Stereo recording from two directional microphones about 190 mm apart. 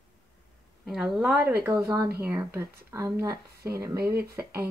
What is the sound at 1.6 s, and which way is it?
Speech, 15° right (ahead or behind).